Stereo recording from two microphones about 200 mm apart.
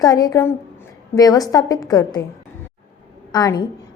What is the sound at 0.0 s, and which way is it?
A woman's voice, 20° left (ahead or behind).